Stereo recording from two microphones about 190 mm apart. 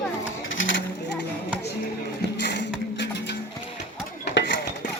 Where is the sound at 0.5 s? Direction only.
80° left.